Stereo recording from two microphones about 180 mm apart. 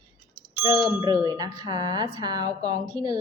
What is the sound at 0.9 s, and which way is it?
Speech, 20° right (ahead or behind).